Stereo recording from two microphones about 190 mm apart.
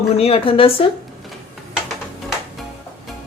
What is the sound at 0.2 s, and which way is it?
Speech, 30° left (ahead or behind).